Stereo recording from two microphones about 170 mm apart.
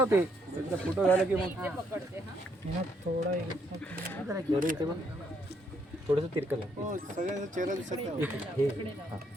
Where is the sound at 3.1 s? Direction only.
60° right (ahead or behind).